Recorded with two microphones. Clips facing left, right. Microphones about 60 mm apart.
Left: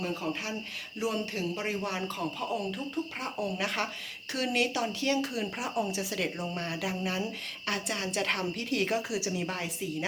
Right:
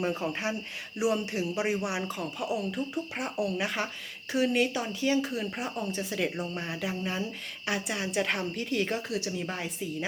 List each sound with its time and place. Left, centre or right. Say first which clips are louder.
0.0 s speech: right 3 dB; right
0.9 s speech: right 4 dB; centre